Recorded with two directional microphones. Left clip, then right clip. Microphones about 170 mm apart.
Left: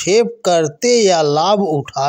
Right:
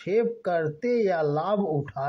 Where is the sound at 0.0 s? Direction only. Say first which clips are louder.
Left 11 dB; 45° left (ahead or behind).